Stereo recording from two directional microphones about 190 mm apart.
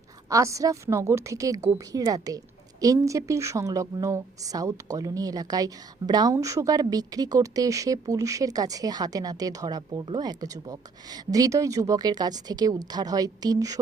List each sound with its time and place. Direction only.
0.3 s a woman's voice: 15° right (ahead or behind)